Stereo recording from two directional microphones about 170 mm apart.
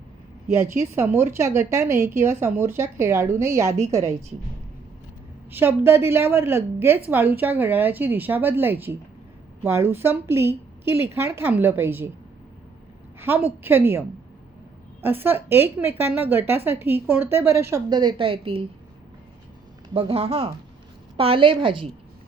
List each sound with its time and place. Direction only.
0.4 s a woman's voice: 15° right (ahead or behind)
5.5 s a woman's voice: 15° right (ahead or behind)
13.1 s a woman's voice: 15° right (ahead or behind)
15.0 s a woman's voice: 10° right (ahead or behind); by 18.6 s 30° right (ahead or behind)
19.9 s a woman's voice: 35° right (ahead or behind)